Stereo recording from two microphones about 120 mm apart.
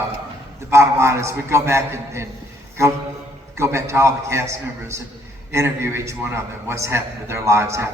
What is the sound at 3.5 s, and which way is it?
A man's voice, 25° right (ahead or behind).